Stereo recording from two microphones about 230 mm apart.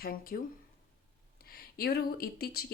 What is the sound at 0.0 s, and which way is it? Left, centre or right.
Speech, left.